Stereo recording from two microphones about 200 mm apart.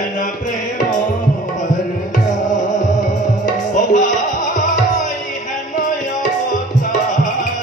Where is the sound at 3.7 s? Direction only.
40° left (ahead or behind).